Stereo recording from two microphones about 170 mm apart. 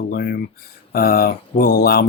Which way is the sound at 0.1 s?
60° left (ahead or behind).